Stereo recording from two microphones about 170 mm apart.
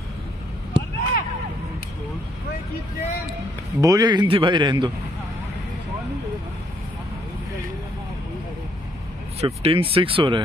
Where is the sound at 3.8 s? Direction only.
20° right (ahead or behind).